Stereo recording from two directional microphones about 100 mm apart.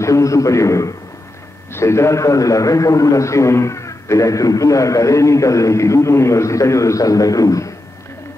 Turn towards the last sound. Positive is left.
turn(degrees=35)  # may be behind; listen again after turning